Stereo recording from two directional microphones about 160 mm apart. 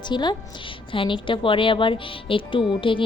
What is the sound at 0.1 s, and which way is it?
A woman's voice, 30° left (ahead or behind).